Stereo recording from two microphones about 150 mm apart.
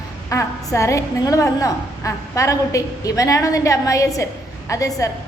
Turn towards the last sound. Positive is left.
turn(degrees=20)  # may be behind; listen again after turning